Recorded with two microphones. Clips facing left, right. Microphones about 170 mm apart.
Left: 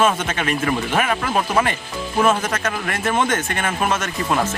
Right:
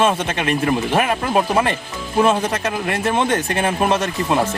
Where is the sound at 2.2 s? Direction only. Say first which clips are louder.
Left 1 dB; 25° right (ahead or behind).